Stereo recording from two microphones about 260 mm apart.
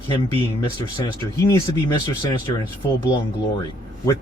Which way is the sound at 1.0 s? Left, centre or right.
Centre.